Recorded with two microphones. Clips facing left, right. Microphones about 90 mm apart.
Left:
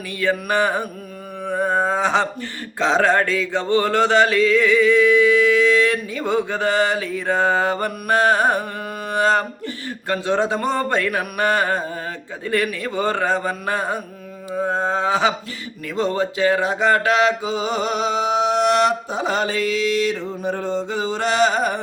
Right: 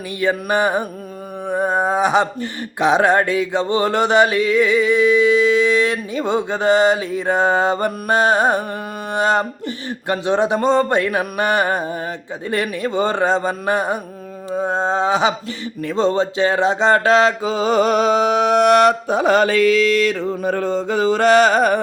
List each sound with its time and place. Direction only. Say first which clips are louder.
0.2 s music: right 2 dB; 15° right (ahead or behind)
1.5 s speech: right 1 dB; 20° right (ahead or behind)
16.0 s mantra: right 3 dB; 25° right (ahead or behind); by 21.8 s 55° right (ahead or behind)